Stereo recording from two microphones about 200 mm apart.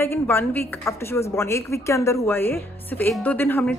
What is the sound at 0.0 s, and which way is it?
A woman's voice, 10° left (ahead or behind).